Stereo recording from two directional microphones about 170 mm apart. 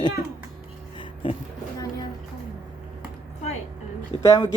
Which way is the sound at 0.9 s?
30° left (ahead or behind).